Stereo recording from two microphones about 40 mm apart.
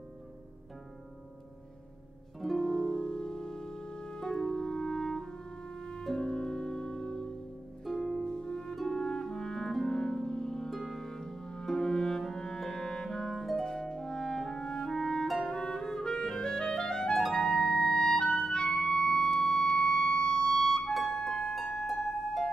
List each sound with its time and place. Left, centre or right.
2.6 s music: centre
8.0 s harp: centre
8.3 s harp: centre
8.8 s clarinet: centre
10.7 s music: centre
13.4 s harp: centre
13.7 s clarinet: centre
17.3 s music: centre